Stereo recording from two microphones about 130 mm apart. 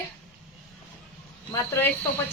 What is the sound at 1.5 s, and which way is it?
Speech, 20° left (ahead or behind).